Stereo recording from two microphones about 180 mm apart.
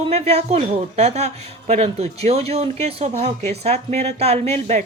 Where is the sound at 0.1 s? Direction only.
35° right (ahead or behind).